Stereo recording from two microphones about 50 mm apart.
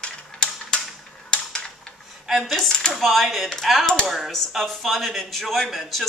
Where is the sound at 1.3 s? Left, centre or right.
Centre.